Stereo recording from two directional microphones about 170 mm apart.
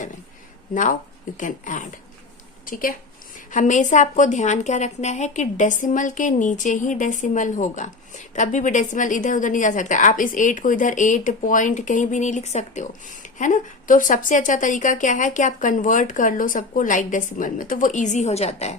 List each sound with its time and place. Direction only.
0.7 s a woman's voice: 50° left (ahead or behind)